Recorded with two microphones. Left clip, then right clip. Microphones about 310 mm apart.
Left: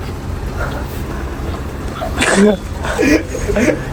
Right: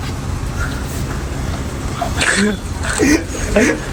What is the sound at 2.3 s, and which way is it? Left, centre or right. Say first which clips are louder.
Speech: left 5 dB; centre.